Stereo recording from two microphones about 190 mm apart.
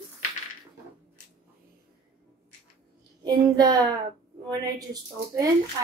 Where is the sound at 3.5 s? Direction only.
20° right (ahead or behind).